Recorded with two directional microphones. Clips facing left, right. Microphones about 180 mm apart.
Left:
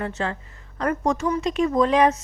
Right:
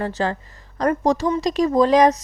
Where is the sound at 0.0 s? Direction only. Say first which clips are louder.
Right 4 dB; 35° right (ahead or behind).